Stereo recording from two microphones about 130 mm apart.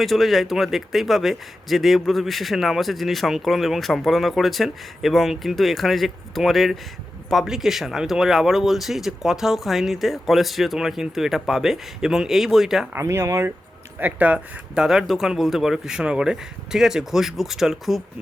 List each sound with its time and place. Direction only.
0.0 s a man's voice: centre (ahead or behind)
12.9 s a man's voice: 20° right (ahead or behind); by 18.0 s centre (ahead or behind)